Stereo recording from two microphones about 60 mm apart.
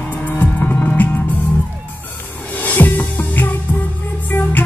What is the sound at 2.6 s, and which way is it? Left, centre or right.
Music, left.